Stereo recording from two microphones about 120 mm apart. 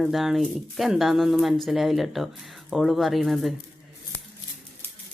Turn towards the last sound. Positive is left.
turn(degrees=0)  # may be behind; listen again after turning